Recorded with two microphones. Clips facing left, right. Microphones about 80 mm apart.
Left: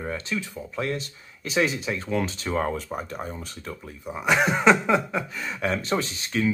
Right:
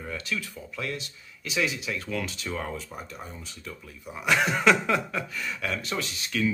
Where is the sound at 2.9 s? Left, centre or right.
Left.